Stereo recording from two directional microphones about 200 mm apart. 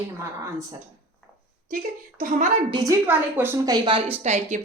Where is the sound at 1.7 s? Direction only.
40° right (ahead or behind).